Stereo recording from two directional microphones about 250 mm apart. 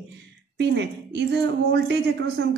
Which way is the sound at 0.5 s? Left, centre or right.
Right.